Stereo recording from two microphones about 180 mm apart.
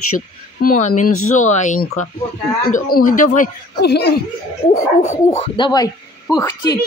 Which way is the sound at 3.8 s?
65° left (ahead or behind).